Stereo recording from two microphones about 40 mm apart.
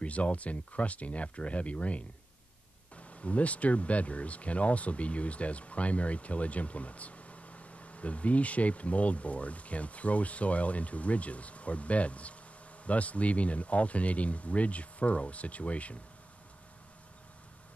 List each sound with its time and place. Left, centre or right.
0.0 s speech: left